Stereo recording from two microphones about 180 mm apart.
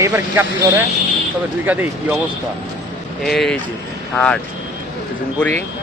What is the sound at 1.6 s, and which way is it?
Speech, 10° right (ahead or behind).